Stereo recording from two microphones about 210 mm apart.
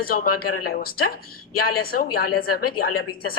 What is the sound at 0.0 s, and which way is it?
A woman's voice, 45° left (ahead or behind).